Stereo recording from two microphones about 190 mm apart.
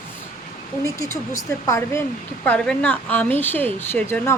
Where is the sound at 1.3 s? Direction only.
15° left (ahead or behind).